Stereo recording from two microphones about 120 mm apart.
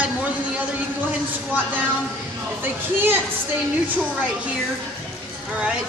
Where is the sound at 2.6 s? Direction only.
15° right (ahead or behind).